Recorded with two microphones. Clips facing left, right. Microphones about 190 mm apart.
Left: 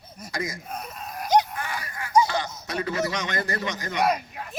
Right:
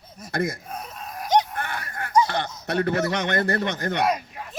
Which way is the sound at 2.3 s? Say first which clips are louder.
Right 2 dB; 60° right (ahead or behind).